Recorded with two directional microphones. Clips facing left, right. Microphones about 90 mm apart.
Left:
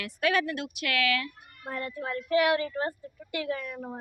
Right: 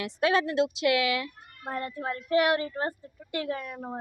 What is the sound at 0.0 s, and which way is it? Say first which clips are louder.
Speech: right 2 dB; 25° right (ahead or behind).